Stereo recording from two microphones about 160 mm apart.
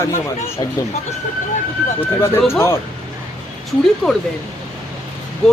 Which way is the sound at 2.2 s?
20° left (ahead or behind).